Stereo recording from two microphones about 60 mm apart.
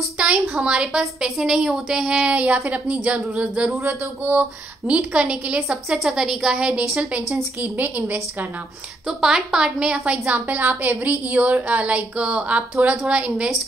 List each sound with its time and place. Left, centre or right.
0.2 s a woman's voice: centre
5.7 s a woman's voice: centre
7.6 s a woman's voice: right
9.0 s a woman's voice: centre